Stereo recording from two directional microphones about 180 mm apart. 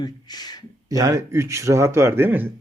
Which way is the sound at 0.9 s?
20° right (ahead or behind).